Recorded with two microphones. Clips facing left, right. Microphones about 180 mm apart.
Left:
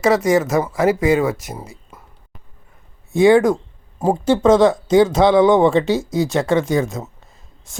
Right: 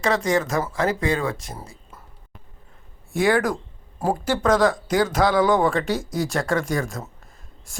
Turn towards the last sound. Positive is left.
turn(degrees=25)  # may be behind; listen again after turning